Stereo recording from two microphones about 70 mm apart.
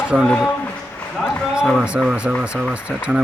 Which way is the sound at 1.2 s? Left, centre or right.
Centre.